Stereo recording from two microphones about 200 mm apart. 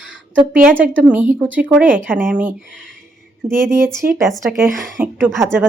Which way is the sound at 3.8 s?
15° right (ahead or behind).